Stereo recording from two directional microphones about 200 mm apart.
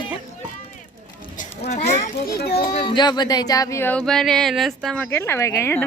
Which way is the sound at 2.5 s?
25° left (ahead or behind).